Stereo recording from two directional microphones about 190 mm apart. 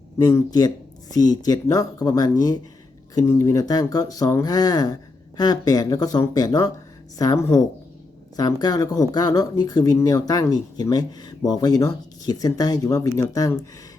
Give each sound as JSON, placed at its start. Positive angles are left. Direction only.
{"t": 0.2, "sound": "a woman's voice", "side_deg": 20}